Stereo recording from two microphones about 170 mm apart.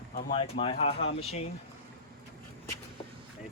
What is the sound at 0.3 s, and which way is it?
Speech, 35° left (ahead or behind).